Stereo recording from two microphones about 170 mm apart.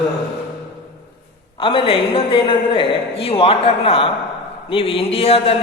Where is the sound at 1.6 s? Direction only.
30° left (ahead or behind).